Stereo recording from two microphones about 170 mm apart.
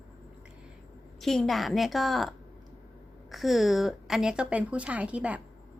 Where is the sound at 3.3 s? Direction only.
Centre (ahead or behind).